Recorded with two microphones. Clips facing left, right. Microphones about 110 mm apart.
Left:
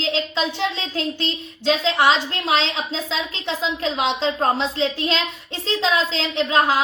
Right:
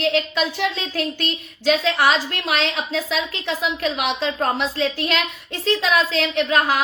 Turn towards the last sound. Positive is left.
turn(degrees=30)  # may be behind; listen again after turning